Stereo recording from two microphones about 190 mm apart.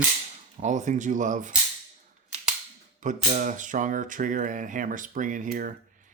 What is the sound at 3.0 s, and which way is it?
Speech, 40° right (ahead or behind).